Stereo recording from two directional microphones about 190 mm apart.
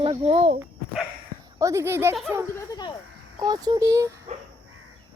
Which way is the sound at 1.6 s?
15° right (ahead or behind).